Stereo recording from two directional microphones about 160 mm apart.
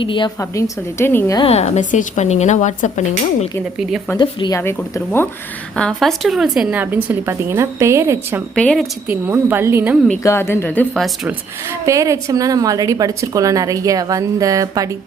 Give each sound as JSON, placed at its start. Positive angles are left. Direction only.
{"t": 0.0, "sound": "a woman's voice", "side_deg": 30}
{"t": 0.3, "sound": "a woman's voice", "side_deg": 15}
{"t": 1.4, "sound": "a woman's voice", "side_deg": 40}
{"t": 4.2, "sound": "speech", "side_deg": 25}
{"t": 4.6, "sound": "a woman's voice", "side_deg": 15}
{"t": 8.5, "sound": "a woman's voice", "side_deg": 5}
{"t": 9.0, "sound": "a woman's voice", "side_deg": -10}
{"t": 10.2, "sound": "a woman's voice", "side_deg": 15}
{"t": 11.9, "sound": "a woman's voice", "side_deg": -20}